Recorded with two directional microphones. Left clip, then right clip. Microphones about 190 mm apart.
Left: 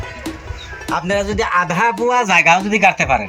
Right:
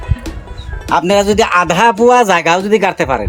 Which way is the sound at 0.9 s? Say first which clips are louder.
Right 8 dB; 65° right (ahead or behind).